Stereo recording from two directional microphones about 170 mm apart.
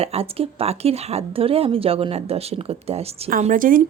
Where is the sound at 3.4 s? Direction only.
55° right (ahead or behind).